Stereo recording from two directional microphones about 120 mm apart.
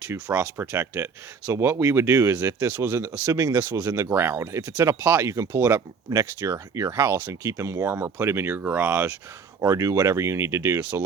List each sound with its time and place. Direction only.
0.1 s speech: 20° right (ahead or behind)